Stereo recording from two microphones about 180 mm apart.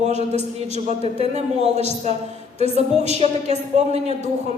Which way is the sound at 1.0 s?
35° right (ahead or behind).